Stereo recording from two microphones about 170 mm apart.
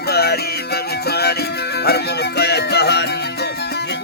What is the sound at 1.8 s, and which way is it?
Music, 70° left (ahead or behind).